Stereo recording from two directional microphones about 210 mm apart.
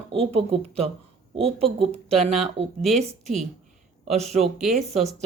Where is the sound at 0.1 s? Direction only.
25° right (ahead or behind).